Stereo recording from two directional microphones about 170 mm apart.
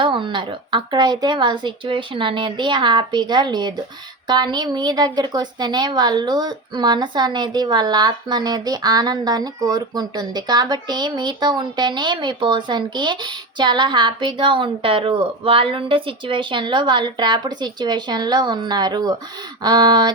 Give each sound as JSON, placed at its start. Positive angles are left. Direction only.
{"t": 0.0, "sound": "a woman's voice", "side_deg": -30}